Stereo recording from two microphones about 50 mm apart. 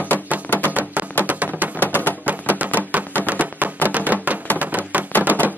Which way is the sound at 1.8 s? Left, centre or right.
Left.